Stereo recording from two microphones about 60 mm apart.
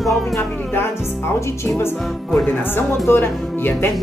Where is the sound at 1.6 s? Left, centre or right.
Left.